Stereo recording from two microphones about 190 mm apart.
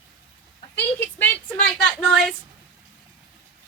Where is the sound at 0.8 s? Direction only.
10° left (ahead or behind).